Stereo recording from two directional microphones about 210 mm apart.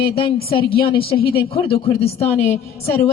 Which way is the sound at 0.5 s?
25° left (ahead or behind).